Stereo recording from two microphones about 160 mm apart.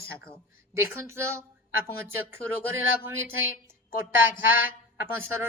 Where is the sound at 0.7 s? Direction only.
15° right (ahead or behind).